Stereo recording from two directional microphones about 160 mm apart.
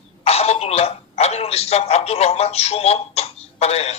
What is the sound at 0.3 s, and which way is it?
A man's voice, 40° left (ahead or behind).